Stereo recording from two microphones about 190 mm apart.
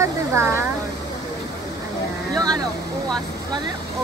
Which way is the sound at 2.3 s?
20° right (ahead or behind).